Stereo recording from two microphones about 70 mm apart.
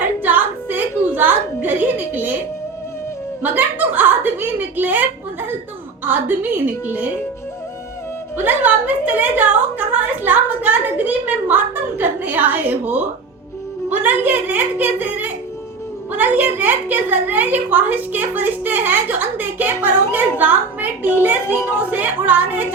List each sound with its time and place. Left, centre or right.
0.0 s music: right
3.4 s a sound: right
6.1 s a woman's voice: right
8.4 s a woman's voice: right
14.0 s a woman's voice: right